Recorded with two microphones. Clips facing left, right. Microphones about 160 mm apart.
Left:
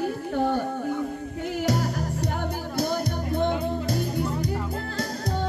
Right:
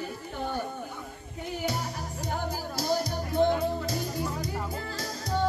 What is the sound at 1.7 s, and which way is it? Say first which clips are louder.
Music: left 9 dB; 70° left (ahead or behind).